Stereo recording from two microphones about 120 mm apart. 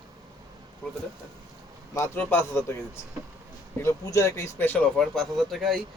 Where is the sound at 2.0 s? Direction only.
15° left (ahead or behind).